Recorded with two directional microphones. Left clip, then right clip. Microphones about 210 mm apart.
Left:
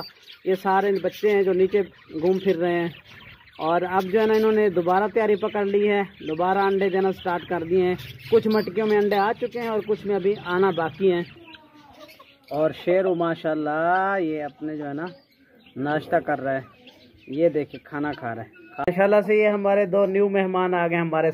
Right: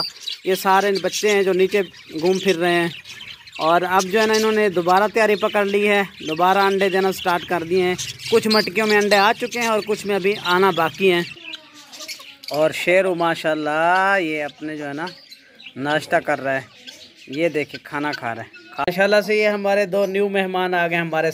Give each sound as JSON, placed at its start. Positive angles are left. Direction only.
{"t": 0.0, "sound": "bird", "side_deg": -20}
{"t": 1.2, "sound": "speech", "side_deg": -20}
{"t": 6.2, "sound": "speech", "side_deg": -30}
{"t": 12.4, "sound": "speech", "side_deg": -10}